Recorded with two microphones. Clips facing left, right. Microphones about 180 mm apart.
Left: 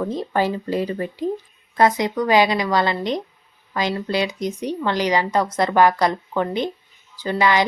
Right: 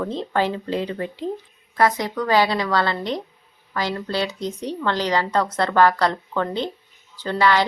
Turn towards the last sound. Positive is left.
turn(degrees=15)  # may be behind; listen again after turning